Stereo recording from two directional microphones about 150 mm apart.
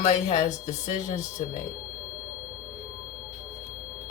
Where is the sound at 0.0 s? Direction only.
50° left (ahead or behind).